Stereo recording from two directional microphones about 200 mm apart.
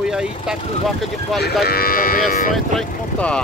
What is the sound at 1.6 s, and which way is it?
Livestock, 50° left (ahead or behind).